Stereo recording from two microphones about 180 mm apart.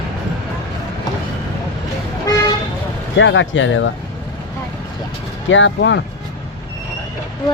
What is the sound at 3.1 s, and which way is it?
Speech, 90° left.